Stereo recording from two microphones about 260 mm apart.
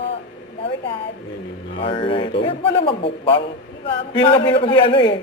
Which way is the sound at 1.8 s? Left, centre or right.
Left.